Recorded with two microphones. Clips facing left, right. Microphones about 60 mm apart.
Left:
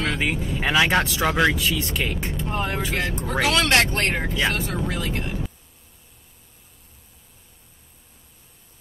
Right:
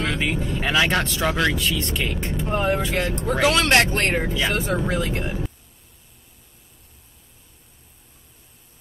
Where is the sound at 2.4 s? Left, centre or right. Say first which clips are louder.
Right 6 dB; right.